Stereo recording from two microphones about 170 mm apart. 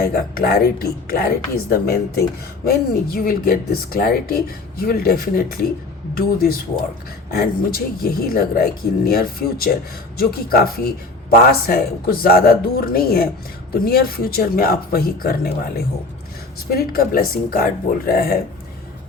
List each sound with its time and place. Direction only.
0.0 s speech: 60° left (ahead or behind)